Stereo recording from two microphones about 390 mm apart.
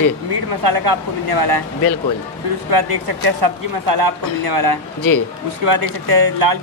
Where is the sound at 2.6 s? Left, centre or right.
Right.